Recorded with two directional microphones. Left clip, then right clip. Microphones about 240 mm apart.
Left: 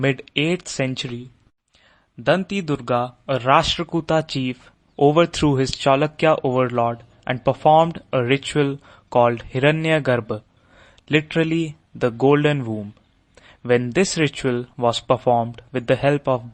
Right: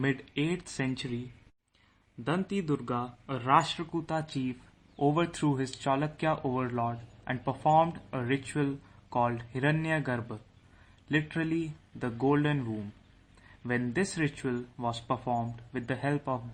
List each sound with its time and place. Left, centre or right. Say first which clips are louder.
0.0 s speech: left 11 dB; left
2.2 s speech: left 13 dB; left